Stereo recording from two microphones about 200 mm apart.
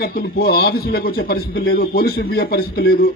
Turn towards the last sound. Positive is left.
turn(degrees=50)  # may be behind; listen again after turning